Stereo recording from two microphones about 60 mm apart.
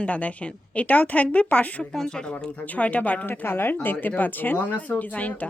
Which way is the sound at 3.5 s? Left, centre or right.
Left.